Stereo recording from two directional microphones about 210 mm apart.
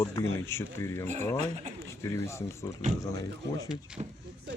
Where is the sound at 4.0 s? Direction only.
25° right (ahead or behind).